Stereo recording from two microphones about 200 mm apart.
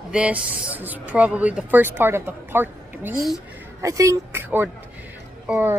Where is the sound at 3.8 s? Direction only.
15° right (ahead or behind).